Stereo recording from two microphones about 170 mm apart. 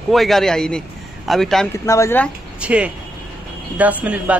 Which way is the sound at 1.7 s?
15° left (ahead or behind).